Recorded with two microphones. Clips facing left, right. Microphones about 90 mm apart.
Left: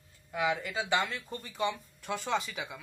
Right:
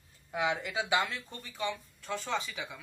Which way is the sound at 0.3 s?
15° right (ahead or behind).